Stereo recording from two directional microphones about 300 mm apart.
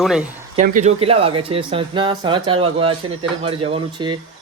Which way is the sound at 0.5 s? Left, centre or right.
Right.